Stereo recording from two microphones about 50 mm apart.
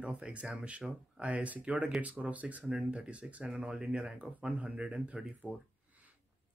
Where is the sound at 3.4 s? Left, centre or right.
Centre.